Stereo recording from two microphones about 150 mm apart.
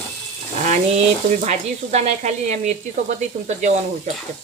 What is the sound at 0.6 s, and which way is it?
Frying, 55° right (ahead or behind).